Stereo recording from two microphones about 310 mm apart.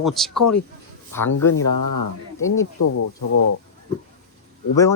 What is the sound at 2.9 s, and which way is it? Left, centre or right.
Speech, left.